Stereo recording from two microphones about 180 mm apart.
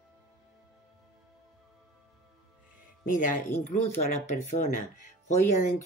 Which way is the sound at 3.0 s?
45° left (ahead or behind).